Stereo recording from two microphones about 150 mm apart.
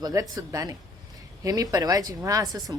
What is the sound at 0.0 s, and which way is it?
Speech, 25° right (ahead or behind).